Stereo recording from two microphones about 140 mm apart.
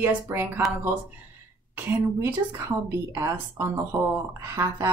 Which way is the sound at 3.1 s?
20° right (ahead or behind).